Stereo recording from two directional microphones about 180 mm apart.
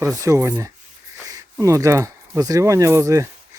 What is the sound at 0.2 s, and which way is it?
Speech, 15° right (ahead or behind).